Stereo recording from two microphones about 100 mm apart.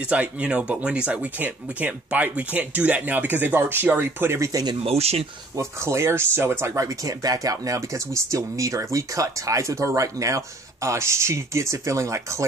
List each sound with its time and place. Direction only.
0.0 s speech: 10° right (ahead or behind); by 4.7 s 35° right (ahead or behind)
4.8 s speech: 90° right
5.6 s speech: 30° right (ahead or behind)